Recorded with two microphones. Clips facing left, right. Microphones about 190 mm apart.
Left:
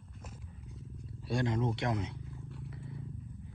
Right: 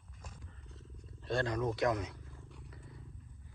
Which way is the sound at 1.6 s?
25° left (ahead or behind).